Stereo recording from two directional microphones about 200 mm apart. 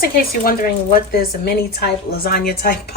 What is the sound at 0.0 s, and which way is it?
Speech, 50° left (ahead or behind).